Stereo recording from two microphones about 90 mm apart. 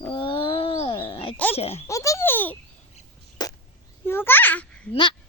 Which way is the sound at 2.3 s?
20° left (ahead or behind).